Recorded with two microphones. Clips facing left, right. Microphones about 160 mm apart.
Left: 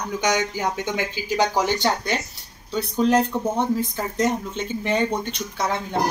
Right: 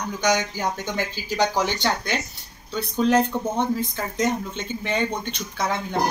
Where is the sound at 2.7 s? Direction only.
Centre (ahead or behind).